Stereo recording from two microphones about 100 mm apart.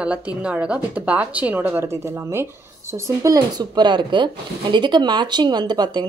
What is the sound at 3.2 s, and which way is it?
Speech, 40° right (ahead or behind).